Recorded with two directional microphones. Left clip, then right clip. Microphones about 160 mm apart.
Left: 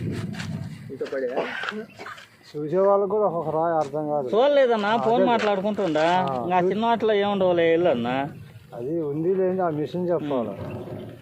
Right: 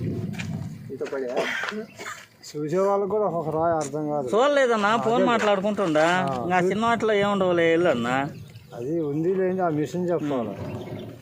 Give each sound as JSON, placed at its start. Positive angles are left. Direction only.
{"t": 1.4, "sound": "speech", "side_deg": -30}
{"t": 2.6, "sound": "speech", "side_deg": -35}